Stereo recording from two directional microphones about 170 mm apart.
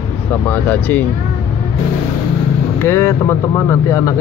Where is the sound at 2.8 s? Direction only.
15° left (ahead or behind).